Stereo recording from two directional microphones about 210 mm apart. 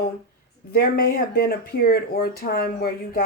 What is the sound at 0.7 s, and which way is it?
Speech, 45° left (ahead or behind).